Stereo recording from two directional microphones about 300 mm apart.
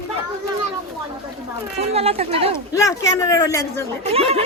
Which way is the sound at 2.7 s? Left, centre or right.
Centre.